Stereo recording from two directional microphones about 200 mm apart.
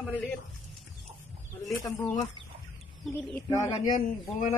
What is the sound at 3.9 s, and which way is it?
Speech, 40° left (ahead or behind).